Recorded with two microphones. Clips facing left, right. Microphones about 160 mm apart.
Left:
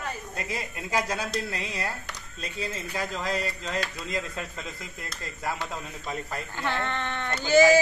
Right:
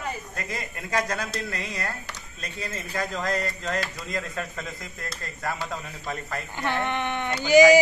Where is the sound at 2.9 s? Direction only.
5° left (ahead or behind).